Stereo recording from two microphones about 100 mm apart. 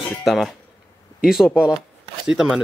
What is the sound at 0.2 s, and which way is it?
Speech, centre (ahead or behind).